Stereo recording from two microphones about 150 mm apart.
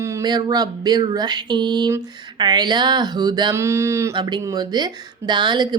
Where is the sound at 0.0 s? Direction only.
25° right (ahead or behind).